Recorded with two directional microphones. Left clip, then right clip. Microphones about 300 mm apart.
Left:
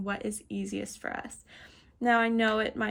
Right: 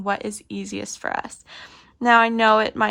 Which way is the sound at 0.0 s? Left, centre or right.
Centre.